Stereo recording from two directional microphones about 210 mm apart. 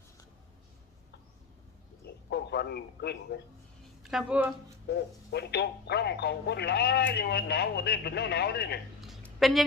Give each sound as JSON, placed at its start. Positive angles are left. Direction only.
{"t": 2.0, "sound": "a man's voice", "side_deg": 50}
{"t": 4.0, "sound": "speech", "side_deg": -5}
{"t": 4.9, "sound": "speech", "side_deg": 50}
{"t": 9.0, "sound": "a sound", "side_deg": 0}